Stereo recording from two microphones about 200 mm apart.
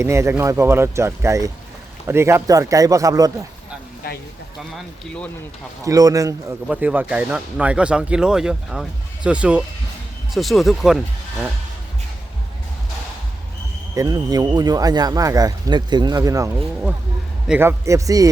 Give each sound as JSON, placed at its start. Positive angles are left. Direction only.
{"t": 0.0, "sound": "speech", "side_deg": -15}
{"t": 4.7, "sound": "speech", "side_deg": 5}
{"t": 5.8, "sound": "speech", "side_deg": -15}
{"t": 13.9, "sound": "speech", "side_deg": -20}
{"t": 17.5, "sound": "speech", "side_deg": -10}